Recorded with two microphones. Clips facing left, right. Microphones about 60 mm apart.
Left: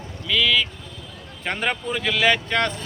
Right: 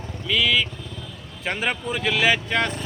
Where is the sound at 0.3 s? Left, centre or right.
Centre.